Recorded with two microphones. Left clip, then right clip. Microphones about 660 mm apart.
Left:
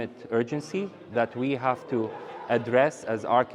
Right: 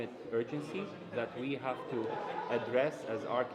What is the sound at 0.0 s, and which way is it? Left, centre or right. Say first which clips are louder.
A man's voice: left 8 dB; left.